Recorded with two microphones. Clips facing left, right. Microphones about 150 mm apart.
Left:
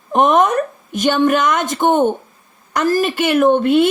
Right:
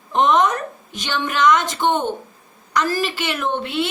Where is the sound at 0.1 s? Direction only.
50° left (ahead or behind).